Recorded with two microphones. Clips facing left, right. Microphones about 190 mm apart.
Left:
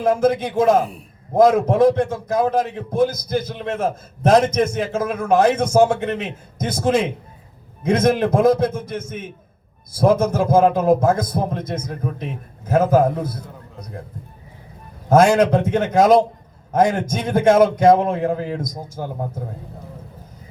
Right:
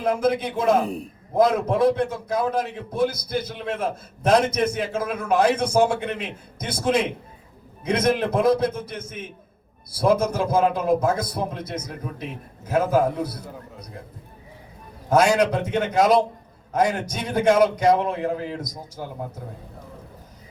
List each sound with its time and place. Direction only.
0.0 s a man's voice: 45° left (ahead or behind)
15.1 s a man's voice: 50° left (ahead or behind)